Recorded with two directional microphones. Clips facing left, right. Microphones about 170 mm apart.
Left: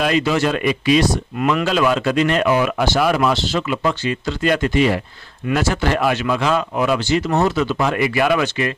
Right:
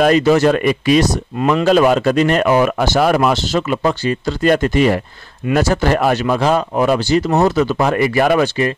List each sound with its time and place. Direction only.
0.0 s a man's voice: 45° right (ahead or behind)